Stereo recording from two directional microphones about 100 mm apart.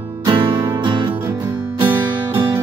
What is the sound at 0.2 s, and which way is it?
Music, 55° right (ahead or behind).